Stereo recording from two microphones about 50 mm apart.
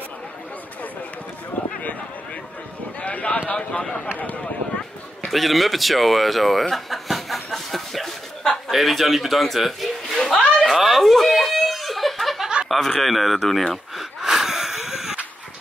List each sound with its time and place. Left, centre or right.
3.0 s a sound: left
5.3 s a sound: centre
8.6 s a man's voice: centre
10.6 s snicker: centre
12.6 s speech: centre
14.2 s wheeze: centre